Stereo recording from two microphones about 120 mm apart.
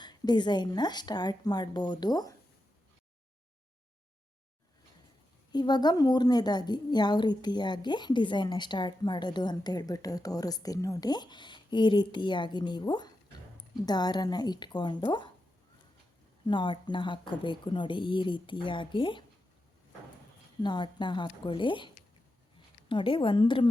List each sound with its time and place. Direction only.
0.0 s a woman's voice: 40° left (ahead or behind)
5.5 s a woman's voice: 35° left (ahead or behind)
16.5 s a woman's voice: 40° left (ahead or behind)
20.6 s a woman's voice: 40° left (ahead or behind)